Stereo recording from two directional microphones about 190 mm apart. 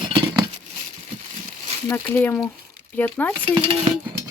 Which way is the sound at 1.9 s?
10° left (ahead or behind).